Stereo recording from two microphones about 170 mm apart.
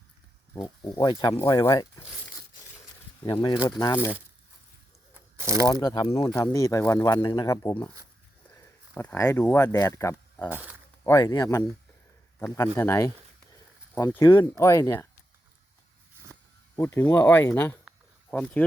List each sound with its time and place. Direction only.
0.9 s speech: 25° left (ahead or behind)
3.2 s speech: 25° left (ahead or behind)
5.6 s speech: 25° left (ahead or behind)
6.2 s speech: 20° left (ahead or behind)
8.4 s a sound: 10° left (ahead or behind)
9.7 s speech: 20° left (ahead or behind)
16.7 s speech: 15° left (ahead or behind)